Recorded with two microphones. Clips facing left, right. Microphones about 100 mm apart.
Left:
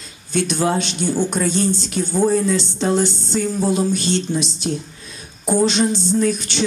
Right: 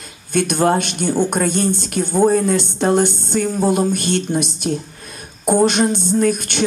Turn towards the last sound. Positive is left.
turn(degrees=-55)  # may be behind; listen again after turning